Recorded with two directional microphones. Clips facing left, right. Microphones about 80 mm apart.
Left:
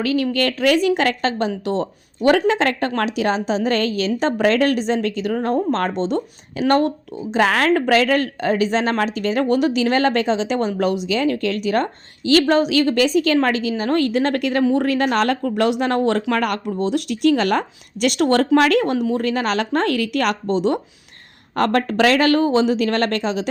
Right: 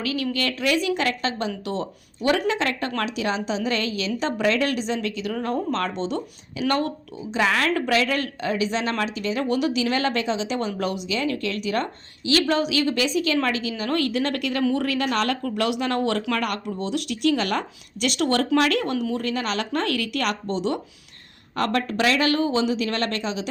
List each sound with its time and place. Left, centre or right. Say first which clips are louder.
0.0 s speech: left 6 dB; left
7.8 s speech: left 6 dB; left